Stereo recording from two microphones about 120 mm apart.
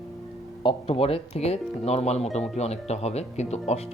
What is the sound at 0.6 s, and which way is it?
Speech, 45° left (ahead or behind).